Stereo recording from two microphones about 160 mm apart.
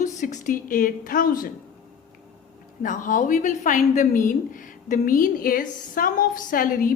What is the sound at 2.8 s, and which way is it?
A woman's voice, 55° left (ahead or behind).